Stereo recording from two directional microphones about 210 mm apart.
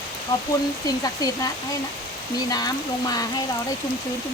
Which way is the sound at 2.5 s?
20° left (ahead or behind).